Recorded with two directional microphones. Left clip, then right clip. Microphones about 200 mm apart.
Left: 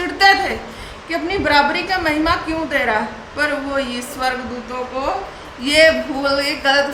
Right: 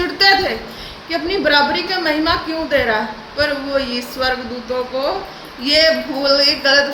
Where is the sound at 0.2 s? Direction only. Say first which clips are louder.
Even; 15° left (ahead or behind).